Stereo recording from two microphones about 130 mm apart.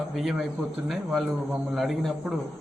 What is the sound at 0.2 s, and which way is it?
Speech, centre (ahead or behind).